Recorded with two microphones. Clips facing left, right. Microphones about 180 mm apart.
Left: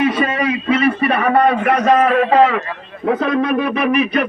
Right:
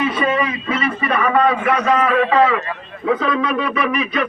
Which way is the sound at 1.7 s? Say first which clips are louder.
Left 3 dB; 55° left (ahead or behind).